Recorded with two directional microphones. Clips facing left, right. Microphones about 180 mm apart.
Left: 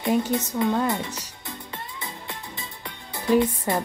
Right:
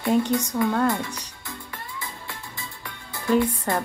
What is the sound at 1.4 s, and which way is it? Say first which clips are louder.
Music: left 1 dB; 20° left (ahead or behind).